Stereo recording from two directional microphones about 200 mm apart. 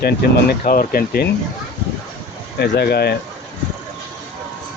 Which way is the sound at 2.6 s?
55° left (ahead or behind).